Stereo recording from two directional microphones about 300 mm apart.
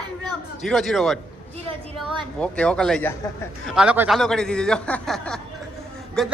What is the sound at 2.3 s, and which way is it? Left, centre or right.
A man's voice, centre.